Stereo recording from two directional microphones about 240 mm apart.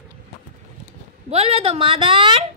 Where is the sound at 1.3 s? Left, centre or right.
Right.